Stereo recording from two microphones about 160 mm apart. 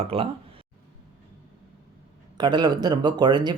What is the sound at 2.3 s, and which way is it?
Speech, 25° right (ahead or behind).